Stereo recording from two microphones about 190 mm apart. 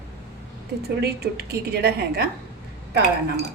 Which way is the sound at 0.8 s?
55° right (ahead or behind).